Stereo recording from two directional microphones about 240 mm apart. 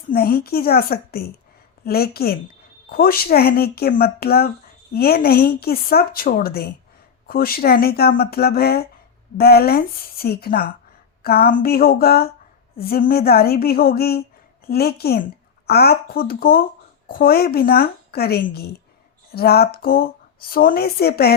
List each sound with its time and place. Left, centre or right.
0.1 s speech: left